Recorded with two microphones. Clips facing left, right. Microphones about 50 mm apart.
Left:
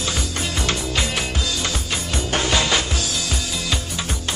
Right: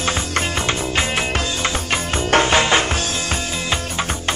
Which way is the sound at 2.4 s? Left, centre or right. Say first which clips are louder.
Right 2 dB; right.